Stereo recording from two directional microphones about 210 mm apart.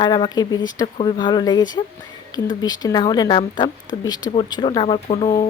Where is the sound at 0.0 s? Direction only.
20° left (ahead or behind).